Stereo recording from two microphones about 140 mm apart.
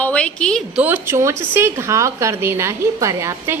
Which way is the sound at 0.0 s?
10° left (ahead or behind).